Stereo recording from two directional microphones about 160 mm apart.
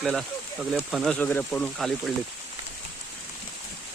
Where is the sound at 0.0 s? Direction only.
5° left (ahead or behind).